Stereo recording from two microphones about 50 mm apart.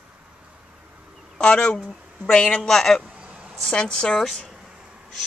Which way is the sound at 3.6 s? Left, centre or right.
Centre.